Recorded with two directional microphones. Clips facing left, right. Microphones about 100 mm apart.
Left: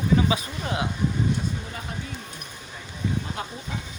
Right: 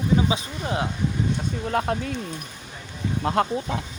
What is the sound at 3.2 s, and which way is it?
Speech, 70° right (ahead or behind).